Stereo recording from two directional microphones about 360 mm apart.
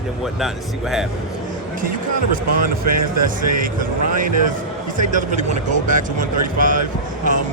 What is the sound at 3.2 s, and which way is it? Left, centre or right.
Speech, right.